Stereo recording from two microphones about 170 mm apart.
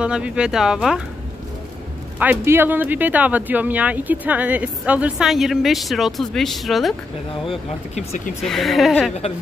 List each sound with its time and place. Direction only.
0.0 s speech: 5° right (ahead or behind)
2.1 s speech: 10° right (ahead or behind)
7.4 s speech: 40° left (ahead or behind)
8.4 s speech: centre (ahead or behind)